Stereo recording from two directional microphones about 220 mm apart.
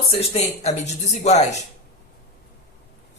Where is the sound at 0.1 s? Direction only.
30° left (ahead or behind).